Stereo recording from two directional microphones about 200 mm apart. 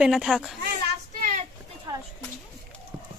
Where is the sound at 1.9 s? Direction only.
15° right (ahead or behind).